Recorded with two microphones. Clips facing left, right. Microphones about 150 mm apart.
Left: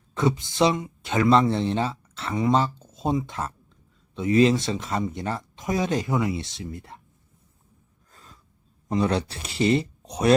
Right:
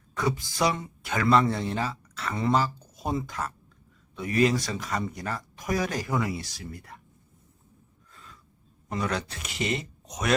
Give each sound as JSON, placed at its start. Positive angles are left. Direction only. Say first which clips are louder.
{"t": 0.1, "sound": "speech", "louder": "left 5 dB", "side_deg": 25}
{"t": 8.1, "sound": "a sound", "louder": "even", "side_deg": 40}
{"t": 8.9, "sound": "speech", "louder": "left 6 dB", "side_deg": 30}